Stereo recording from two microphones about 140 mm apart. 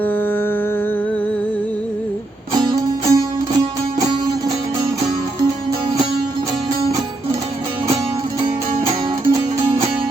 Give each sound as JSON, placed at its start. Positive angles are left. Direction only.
{"t": 2.5, "sound": "music", "side_deg": -25}
{"t": 8.4, "sound": "music", "side_deg": -40}